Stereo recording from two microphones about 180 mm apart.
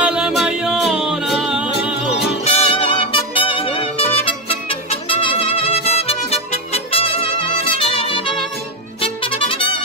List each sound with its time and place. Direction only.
0.0 s music: 5° right (ahead or behind)
2.4 s music: 30° left (ahead or behind)